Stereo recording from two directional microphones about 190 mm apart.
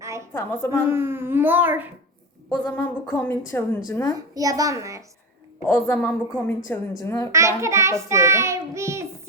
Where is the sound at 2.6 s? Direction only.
15° left (ahead or behind).